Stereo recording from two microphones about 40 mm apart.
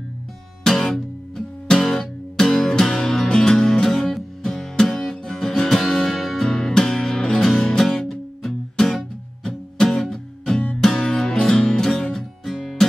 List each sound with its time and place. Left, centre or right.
0.7 s music: centre
6.4 s music: centre
10.5 s music: left
10.8 s music: centre
12.4 s music: centre